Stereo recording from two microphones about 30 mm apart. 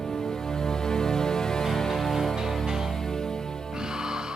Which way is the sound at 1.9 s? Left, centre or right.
Centre.